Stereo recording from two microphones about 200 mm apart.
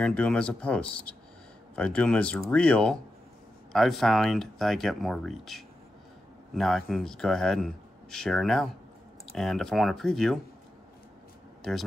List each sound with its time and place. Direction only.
0.0 s speech: 5° left (ahead or behind)
11.6 s speech: centre (ahead or behind)